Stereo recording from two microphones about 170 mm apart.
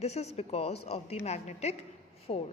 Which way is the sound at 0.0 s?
40° left (ahead or behind).